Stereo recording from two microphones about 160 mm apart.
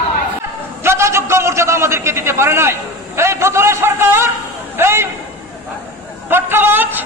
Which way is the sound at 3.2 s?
15° right (ahead or behind).